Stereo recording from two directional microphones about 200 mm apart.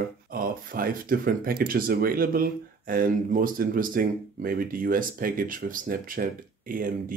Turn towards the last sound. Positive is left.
turn(degrees=-45)  # may be behind; listen again after turning